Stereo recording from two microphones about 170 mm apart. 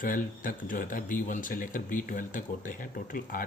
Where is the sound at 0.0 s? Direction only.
50° left (ahead or behind).